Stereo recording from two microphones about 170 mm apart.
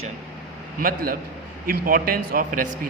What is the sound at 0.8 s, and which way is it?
A man's voice, 55° right (ahead or behind).